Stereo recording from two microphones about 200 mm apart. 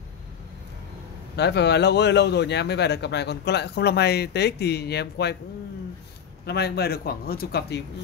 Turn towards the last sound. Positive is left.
turn(degrees=55)  # may be behind; listen again after turning